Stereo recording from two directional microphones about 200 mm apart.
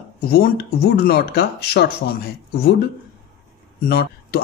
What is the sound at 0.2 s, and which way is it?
Speech, 50° left (ahead or behind).